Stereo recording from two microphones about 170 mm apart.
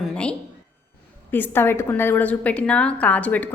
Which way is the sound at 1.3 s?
15° left (ahead or behind).